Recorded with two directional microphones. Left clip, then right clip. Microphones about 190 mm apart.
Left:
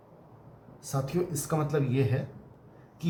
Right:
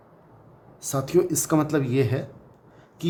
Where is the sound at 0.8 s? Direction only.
55° right (ahead or behind).